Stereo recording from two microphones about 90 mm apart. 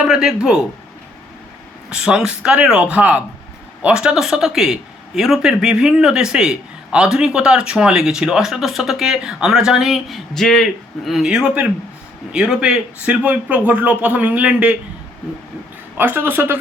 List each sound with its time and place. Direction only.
0.0 s a man's voice: 5° right (ahead or behind)
1.9 s a man's voice: 5° right (ahead or behind)
16.0 s speech: 20° right (ahead or behind)